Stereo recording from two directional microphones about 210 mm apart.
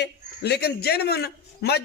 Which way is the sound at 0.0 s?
50° left (ahead or behind).